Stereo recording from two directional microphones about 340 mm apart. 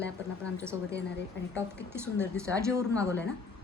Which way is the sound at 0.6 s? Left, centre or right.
Centre.